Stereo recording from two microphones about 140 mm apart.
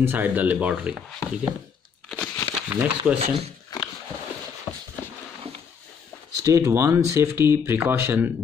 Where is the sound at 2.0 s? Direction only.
10° left (ahead or behind).